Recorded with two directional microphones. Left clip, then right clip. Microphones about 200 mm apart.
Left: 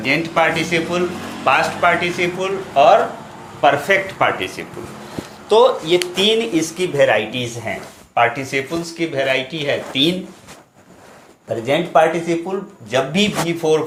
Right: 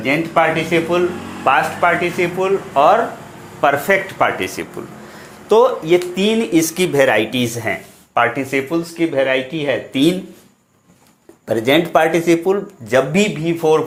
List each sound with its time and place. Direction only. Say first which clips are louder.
0.0 s speech: right 1 dB; 30° right (ahead or behind); by 7.7 s 50° right (ahead or behind)
8.1 s speech: right 1 dB; 35° right (ahead or behind)
11.4 s speech: right 4 dB; 45° right (ahead or behind); by 13.8 s 30° right (ahead or behind)